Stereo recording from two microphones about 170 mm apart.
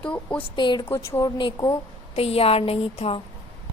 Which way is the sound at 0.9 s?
15° left (ahead or behind).